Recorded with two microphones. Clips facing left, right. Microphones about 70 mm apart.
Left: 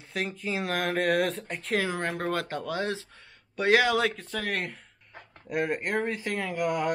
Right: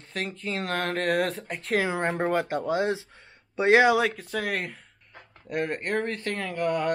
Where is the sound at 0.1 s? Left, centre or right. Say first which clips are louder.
Even; centre.